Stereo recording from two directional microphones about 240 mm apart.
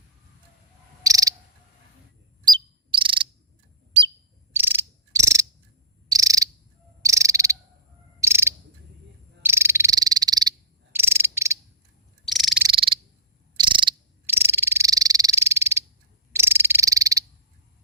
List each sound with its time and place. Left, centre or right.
1.0 s cricket: centre
2.9 s cricket: right
4.5 s insect: centre
6.1 s cricket: centre
9.4 s frog: centre
10.9 s cricket: centre
12.3 s frog: centre
12.6 s frog: right